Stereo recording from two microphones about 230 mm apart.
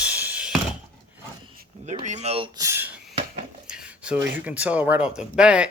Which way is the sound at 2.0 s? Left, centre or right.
Right.